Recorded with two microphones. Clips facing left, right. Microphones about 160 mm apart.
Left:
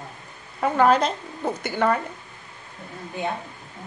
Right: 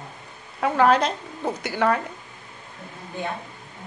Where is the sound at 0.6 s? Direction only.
Centre (ahead or behind).